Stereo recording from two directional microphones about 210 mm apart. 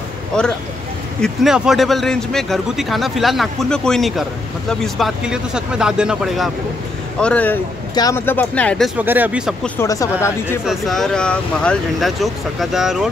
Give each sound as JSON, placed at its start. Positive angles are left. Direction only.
{"t": 1.2, "sound": "speech", "side_deg": 0}
{"t": 9.8, "sound": "speech", "side_deg": 15}
{"t": 10.6, "sound": "speech", "side_deg": 0}